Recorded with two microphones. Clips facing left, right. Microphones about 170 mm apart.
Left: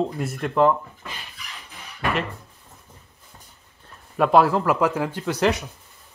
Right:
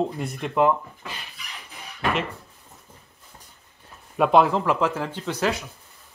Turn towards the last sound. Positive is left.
turn(degrees=15)  # may be behind; listen again after turning